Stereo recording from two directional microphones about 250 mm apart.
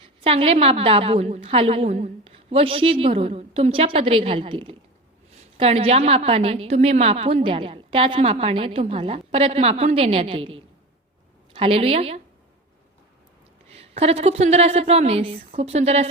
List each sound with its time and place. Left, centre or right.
0.3 s a woman's voice: right
13.7 s a woman's voice: right